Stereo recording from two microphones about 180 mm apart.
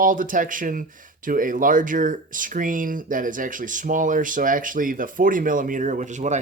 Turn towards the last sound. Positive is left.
turn(degrees=-40)  # may be behind; listen again after turning